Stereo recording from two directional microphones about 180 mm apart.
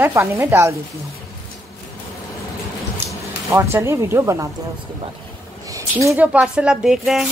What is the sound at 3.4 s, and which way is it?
A woman's voice, 15° right (ahead or behind).